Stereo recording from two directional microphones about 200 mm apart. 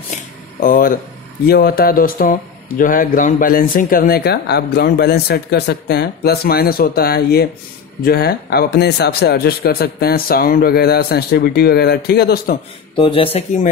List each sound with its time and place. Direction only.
0.6 s speech: 45° left (ahead or behind)
12.9 s speech: 25° left (ahead or behind)